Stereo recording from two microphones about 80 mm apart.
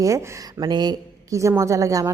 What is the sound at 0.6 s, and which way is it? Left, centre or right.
Speech, right.